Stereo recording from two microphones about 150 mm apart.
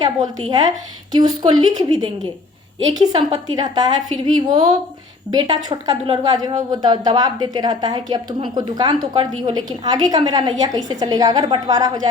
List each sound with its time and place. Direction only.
1.1 s speech: 30° right (ahead or behind)